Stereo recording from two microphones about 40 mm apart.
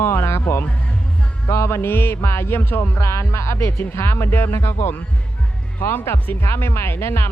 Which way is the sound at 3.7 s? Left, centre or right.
Left.